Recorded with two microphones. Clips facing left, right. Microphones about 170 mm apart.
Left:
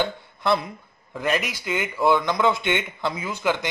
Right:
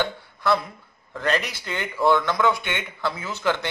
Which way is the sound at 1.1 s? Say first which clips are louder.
Even; 10° left (ahead or behind).